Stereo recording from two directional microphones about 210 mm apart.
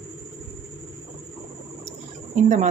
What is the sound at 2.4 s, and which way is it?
Speech, 35° right (ahead or behind).